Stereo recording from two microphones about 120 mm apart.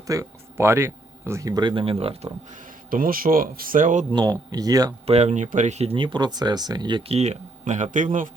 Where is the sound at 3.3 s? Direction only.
45° right (ahead or behind).